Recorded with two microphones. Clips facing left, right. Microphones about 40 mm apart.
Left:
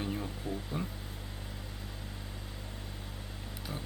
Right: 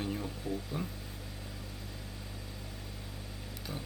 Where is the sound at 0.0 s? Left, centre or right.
Centre.